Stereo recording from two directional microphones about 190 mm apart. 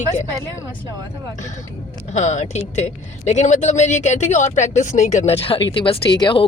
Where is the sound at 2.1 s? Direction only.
40° left (ahead or behind).